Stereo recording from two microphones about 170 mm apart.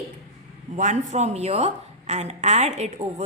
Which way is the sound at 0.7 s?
45° right (ahead or behind).